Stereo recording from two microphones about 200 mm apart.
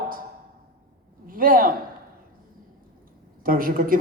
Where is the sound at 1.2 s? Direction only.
45° right (ahead or behind).